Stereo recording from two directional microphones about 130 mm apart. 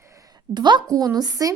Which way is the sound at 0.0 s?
25° right (ahead or behind).